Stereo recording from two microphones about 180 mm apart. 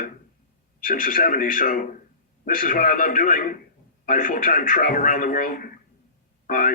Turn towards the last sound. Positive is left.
turn(degrees=50)  # may be behind; listen again after turning